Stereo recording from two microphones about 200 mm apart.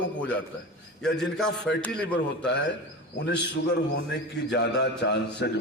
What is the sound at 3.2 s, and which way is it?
A man's voice, 65° left (ahead or behind).